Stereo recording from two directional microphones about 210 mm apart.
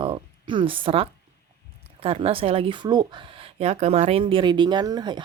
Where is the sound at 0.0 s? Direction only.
25° right (ahead or behind).